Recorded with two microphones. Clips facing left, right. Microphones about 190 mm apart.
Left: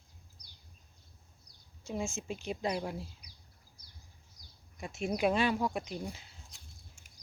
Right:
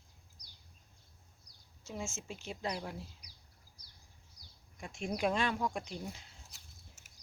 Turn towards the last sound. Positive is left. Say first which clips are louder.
# left 2 dB
turn(degrees=-5)  # may be behind; listen again after turning